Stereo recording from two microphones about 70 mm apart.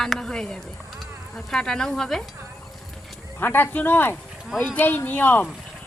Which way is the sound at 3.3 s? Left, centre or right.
Left.